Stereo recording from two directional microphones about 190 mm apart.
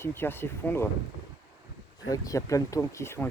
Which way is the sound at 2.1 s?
20° left (ahead or behind).